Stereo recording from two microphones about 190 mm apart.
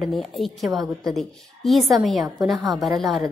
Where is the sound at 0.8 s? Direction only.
20° right (ahead or behind).